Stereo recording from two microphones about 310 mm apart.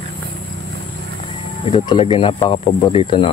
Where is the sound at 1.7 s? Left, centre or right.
Centre.